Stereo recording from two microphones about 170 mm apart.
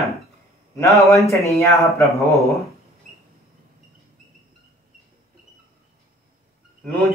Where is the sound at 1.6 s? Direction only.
20° left (ahead or behind).